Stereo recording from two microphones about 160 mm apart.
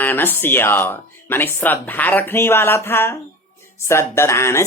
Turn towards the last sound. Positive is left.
turn(degrees=15)  # may be behind; listen again after turning